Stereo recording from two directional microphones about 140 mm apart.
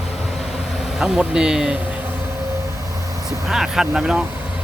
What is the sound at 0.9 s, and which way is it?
Speech, 5° right (ahead or behind).